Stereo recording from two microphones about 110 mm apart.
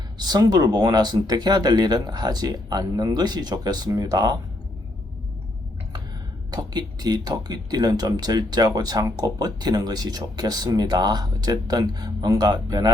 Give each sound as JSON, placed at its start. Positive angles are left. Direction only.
{"t": 0.2, "sound": "speech", "side_deg": -40}
{"t": 6.5, "sound": "speech", "side_deg": -35}